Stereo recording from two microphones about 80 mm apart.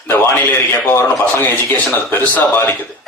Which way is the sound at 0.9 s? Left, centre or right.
Left.